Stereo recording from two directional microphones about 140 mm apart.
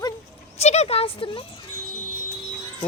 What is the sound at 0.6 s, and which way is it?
Speech, 50° left (ahead or behind).